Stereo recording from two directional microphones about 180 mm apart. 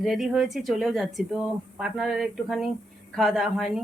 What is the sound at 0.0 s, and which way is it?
A woman's voice, centre (ahead or behind).